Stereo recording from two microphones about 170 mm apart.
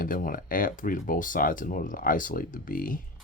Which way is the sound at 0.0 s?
55° left (ahead or behind).